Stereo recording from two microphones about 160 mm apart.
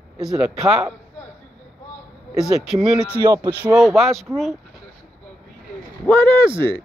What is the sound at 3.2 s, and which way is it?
Speech, 25° right (ahead or behind).